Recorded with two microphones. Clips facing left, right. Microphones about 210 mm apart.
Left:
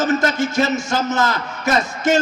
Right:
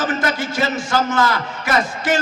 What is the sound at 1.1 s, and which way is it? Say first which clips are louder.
A man's voice: right 1 dB; 45° left (ahead or behind).